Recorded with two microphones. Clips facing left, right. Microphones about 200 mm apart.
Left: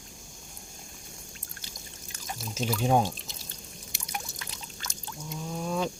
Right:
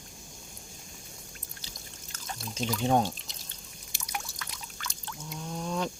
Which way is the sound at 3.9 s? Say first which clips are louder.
Even; 25° left (ahead or behind).